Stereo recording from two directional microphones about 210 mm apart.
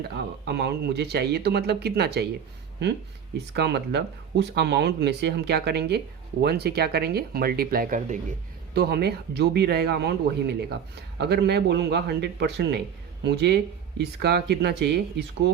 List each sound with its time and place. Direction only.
0.0 s speech: 50° right (ahead or behind)
3.3 s speech: 50° right (ahead or behind); by 8.2 s 35° right (ahead or behind)
8.7 s speech: 50° right (ahead or behind)